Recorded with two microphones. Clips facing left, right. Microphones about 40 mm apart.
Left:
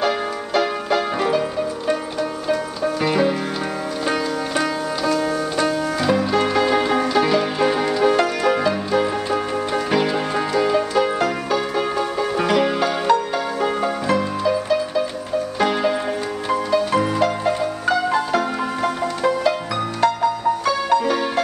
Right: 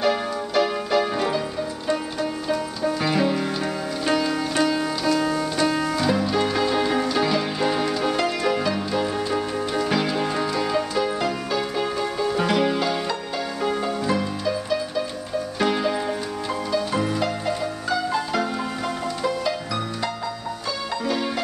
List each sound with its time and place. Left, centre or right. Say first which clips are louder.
0.6 s music: left 1 dB; centre
2.4 s music: left 3 dB; centre
12.4 s music: left 4 dB; centre
12.6 s music: left 5 dB; left
15.6 s music: left 3 dB; centre
16.4 s music: left 6 dB; left
21.0 s music: left 4 dB; left